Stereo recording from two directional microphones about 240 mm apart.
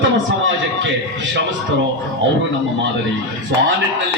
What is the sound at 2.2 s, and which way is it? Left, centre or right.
Speech, right.